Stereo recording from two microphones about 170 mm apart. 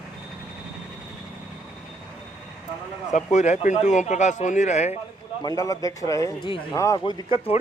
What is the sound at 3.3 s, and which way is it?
Speech, 45° left (ahead or behind).